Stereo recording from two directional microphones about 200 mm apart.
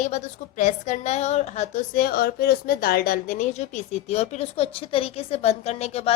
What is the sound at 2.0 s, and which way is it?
A woman's voice, 50° left (ahead or behind).